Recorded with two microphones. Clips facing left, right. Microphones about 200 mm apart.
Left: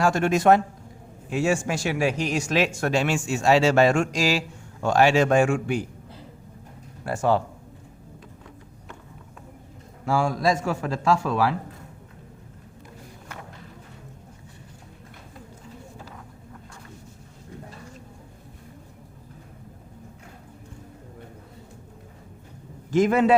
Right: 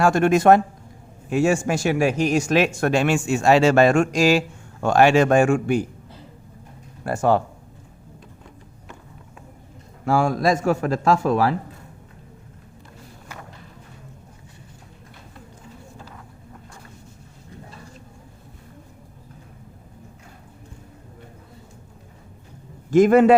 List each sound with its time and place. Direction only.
0.0 s speech: 55° right (ahead or behind)
7.0 s speech: 50° right (ahead or behind)
10.1 s speech: 55° right (ahead or behind)
22.9 s speech: 50° right (ahead or behind)